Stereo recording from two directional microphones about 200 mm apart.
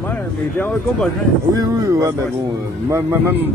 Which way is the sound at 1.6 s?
15° right (ahead or behind).